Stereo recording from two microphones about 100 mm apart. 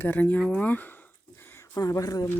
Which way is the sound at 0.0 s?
15° left (ahead or behind).